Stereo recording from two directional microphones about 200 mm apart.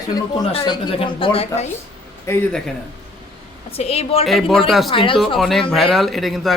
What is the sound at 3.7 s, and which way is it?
Speech, 30° left (ahead or behind).